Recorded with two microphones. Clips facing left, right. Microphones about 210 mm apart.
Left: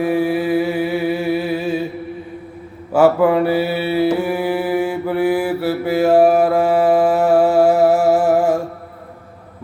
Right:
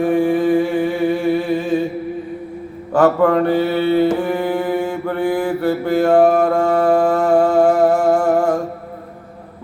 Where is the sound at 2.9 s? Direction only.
10° left (ahead or behind).